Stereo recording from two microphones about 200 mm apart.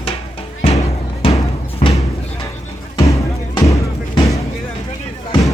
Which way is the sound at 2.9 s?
15° left (ahead or behind).